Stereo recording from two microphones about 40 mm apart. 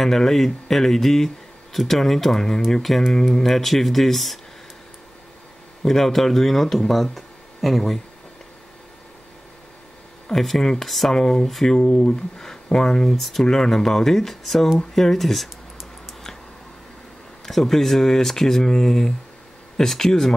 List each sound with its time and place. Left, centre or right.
0.0 s speech: centre
5.9 s speech: centre
10.3 s speech: centre
11.1 s speech: centre
11.8 s speech: left
12.7 s speech: centre
17.5 s speech: centre